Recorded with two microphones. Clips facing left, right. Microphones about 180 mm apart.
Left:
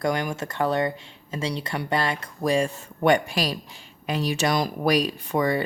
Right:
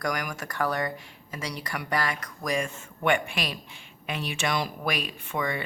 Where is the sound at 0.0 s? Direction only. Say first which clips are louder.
Left 6 dB; 25° left (ahead or behind).